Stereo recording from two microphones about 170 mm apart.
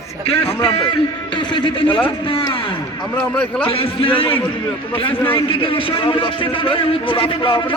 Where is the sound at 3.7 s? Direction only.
35° left (ahead or behind).